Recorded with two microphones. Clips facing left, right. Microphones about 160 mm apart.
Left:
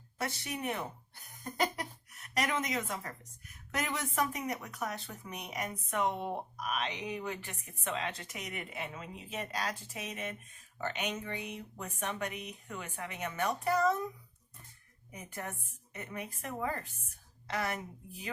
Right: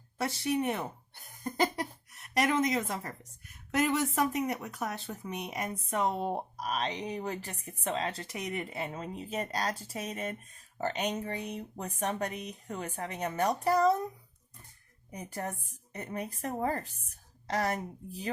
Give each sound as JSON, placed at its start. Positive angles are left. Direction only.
{"t": 0.2, "sound": "speech", "side_deg": -30}
{"t": 3.8, "sound": "speech", "side_deg": -30}
{"t": 15.1, "sound": "speech", "side_deg": -35}